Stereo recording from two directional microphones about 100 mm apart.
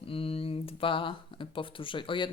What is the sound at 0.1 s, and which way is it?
Speech, 70° left (ahead or behind).